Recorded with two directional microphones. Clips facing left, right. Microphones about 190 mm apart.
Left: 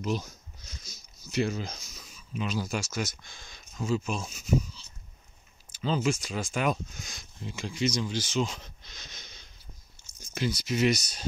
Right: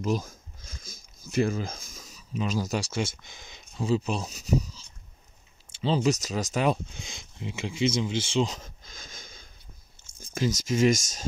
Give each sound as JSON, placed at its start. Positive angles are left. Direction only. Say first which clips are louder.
{"t": 0.8, "sound": "speech", "louder": "right 3 dB", "side_deg": -50}
{"t": 3.7, "sound": "speech", "louder": "right 3 dB", "side_deg": -35}
{"t": 8.5, "sound": "wheeze", "louder": "right 3 dB", "side_deg": -45}
{"t": 10.0, "sound": "a sound", "louder": "right 1 dB", "side_deg": 10}
{"t": 10.3, "sound": "speech", "louder": "right 3 dB", "side_deg": -45}